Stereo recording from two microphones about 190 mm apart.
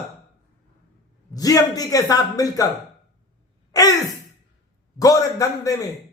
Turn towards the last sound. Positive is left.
turn(degrees=15)  # may be behind; listen again after turning